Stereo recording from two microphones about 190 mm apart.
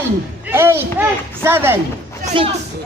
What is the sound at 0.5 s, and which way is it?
A child's voice, 10° right (ahead or behind).